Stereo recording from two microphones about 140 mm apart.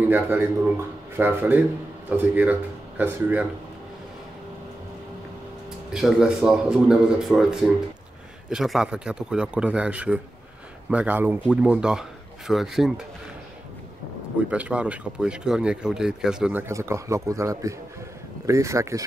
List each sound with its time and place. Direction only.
0.1 s speech: 15° right (ahead or behind)
5.9 s speech: centre (ahead or behind)
14.5 s speech: 10° right (ahead or behind)
16.6 s a man's voice: 20° right (ahead or behind)